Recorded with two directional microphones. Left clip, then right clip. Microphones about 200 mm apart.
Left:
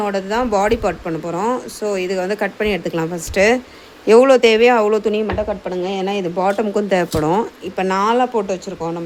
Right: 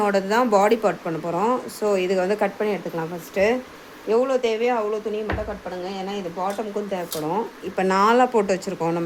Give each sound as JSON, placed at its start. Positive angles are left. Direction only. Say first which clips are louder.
{"t": 0.0, "sound": "speech", "louder": "left 1 dB", "side_deg": 5}
{"t": 2.6, "sound": "a woman's voice", "louder": "left 6 dB", "side_deg": 20}
{"t": 4.1, "sound": "speech", "louder": "left 10 dB", "side_deg": 60}
{"t": 7.1, "sound": "speech", "louder": "left 8 dB", "side_deg": 35}
{"t": 7.8, "sound": "speech", "louder": "left 1 dB", "side_deg": 5}